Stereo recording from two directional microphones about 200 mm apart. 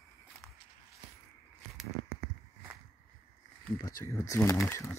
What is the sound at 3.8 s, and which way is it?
Speech, 15° left (ahead or behind).